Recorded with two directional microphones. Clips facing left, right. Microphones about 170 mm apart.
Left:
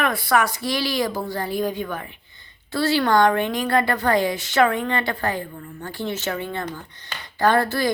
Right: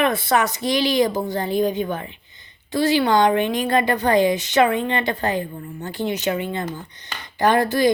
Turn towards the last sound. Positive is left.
turn(degrees=-20)  # may be behind; listen again after turning